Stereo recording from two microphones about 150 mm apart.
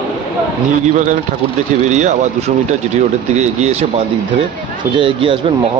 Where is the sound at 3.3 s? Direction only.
50° right (ahead or behind).